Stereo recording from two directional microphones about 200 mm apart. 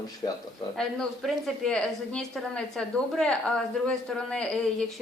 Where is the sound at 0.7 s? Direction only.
Centre (ahead or behind).